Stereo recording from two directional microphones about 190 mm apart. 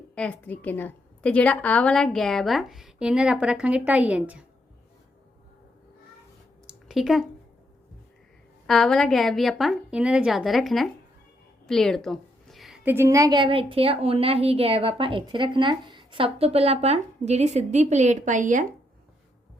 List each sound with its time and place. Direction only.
0.2 s a woman's voice: 10° left (ahead or behind)
6.7 s a sound: centre (ahead or behind)
8.6 s a woman's voice: centre (ahead or behind); by 18.6 s 40° right (ahead or behind)